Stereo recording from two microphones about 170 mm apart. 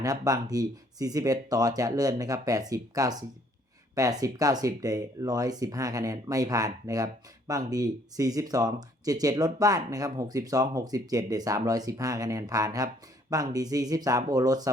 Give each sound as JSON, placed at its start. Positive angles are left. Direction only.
{"t": 0.0, "sound": "speech", "side_deg": -20}